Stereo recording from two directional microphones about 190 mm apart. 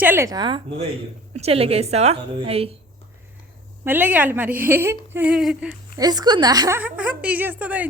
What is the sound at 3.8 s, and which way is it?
A woman's voice, 10° right (ahead or behind).